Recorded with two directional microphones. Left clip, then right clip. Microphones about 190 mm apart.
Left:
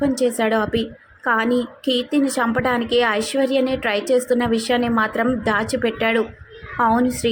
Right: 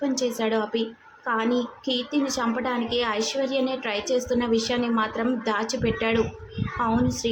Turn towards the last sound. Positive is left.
turn(degrees=25)  # may be behind; listen again after turning